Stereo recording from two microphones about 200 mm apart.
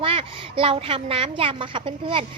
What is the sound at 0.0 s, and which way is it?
Speech, 25° right (ahead or behind).